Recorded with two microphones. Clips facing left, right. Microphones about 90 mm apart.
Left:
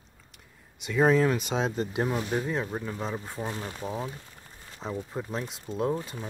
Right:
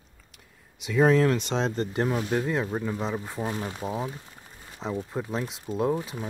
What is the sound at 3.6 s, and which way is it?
Speech, 15° right (ahead or behind).